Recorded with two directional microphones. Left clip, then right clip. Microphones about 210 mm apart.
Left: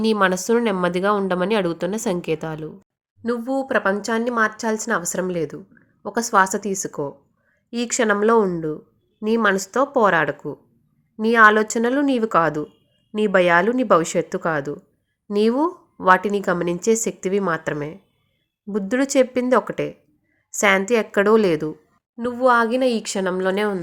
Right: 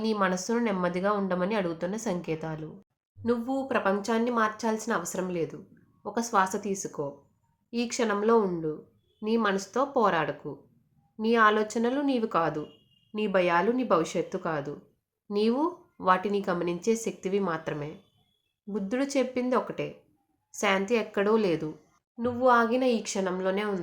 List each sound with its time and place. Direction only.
0.0 s speech: 40° left (ahead or behind)